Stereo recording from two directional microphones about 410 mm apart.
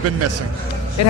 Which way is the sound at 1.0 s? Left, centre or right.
Left.